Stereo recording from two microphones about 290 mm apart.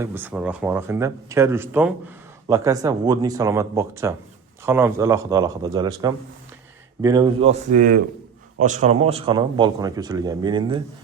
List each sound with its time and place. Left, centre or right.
0.0 s a man's voice: centre